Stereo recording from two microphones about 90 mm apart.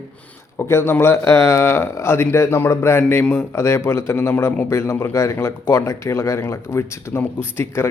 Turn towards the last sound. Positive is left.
turn(degrees=25)  # may be behind; listen again after turning